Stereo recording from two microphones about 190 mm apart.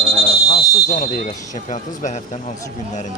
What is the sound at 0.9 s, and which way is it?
Speech, 45° left (ahead or behind).